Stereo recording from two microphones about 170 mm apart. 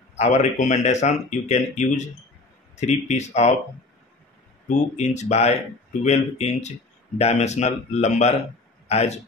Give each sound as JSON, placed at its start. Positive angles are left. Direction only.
{"t": 0.1, "sound": "speech", "side_deg": 40}
{"t": 4.6, "sound": "speech", "side_deg": 40}